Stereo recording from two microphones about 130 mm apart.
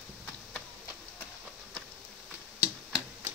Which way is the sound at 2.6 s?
15° right (ahead or behind).